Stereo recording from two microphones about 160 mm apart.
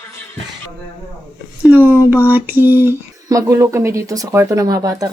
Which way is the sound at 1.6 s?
10° right (ahead or behind).